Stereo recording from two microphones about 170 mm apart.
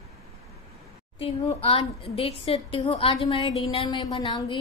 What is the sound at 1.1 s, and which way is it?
A woman's voice, 35° left (ahead or behind).